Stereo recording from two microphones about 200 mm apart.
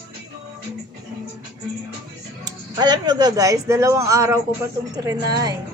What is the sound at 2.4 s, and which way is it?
Speech, 20° right (ahead or behind).